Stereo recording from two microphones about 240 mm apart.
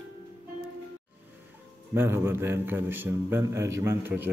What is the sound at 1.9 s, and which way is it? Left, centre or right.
A man's voice, centre.